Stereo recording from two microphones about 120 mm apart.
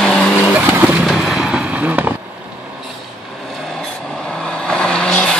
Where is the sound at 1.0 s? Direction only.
5° right (ahead or behind).